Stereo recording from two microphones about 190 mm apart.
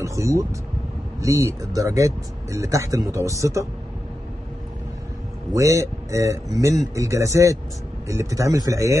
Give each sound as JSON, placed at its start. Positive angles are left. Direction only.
{"t": 0.0, "sound": "speech", "side_deg": -15}
{"t": 5.5, "sound": "speech", "side_deg": -15}